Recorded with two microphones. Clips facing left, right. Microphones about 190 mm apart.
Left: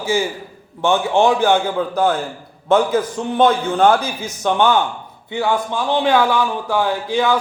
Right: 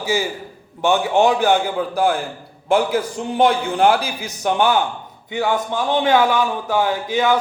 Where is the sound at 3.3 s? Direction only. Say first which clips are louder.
Left 1 dB; 10° right (ahead or behind).